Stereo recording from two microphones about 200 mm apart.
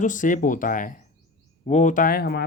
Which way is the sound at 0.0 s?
40° left (ahead or behind).